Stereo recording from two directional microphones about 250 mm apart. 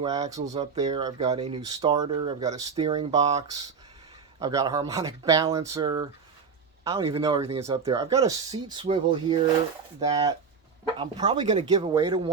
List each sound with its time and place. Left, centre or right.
0.0 s speech: centre